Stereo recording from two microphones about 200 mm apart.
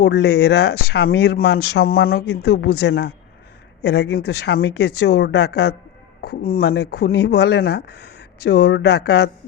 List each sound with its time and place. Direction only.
0.0 s speech: 55° left (ahead or behind)